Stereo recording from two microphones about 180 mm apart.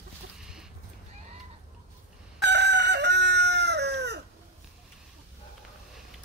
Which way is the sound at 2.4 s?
75° right (ahead or behind).